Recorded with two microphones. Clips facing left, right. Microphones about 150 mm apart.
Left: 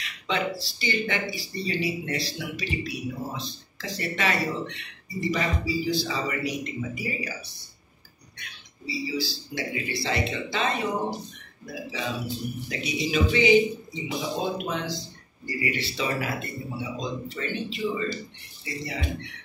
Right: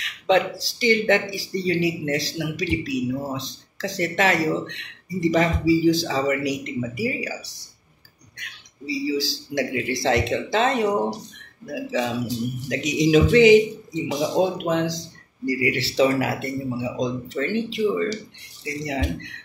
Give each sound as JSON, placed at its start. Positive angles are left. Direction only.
{"t": 0.3, "sound": "speech", "side_deg": -90}
{"t": 8.8, "sound": "speech", "side_deg": -90}